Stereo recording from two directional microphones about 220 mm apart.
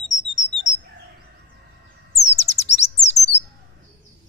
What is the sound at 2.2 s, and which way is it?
Chirp, 30° left (ahead or behind).